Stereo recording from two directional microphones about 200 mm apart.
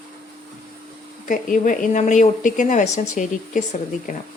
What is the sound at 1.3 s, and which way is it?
Speech, 40° left (ahead or behind).